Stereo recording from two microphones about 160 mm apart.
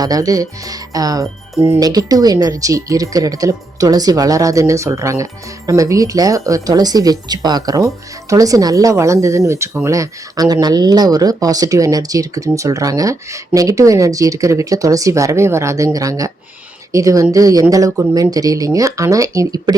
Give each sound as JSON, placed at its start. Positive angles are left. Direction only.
{"t": 0.0, "sound": "speech", "side_deg": -20}